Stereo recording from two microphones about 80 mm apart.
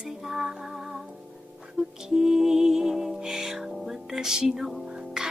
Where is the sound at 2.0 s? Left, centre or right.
Centre.